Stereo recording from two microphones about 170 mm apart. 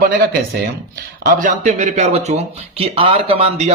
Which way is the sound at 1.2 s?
55° right (ahead or behind).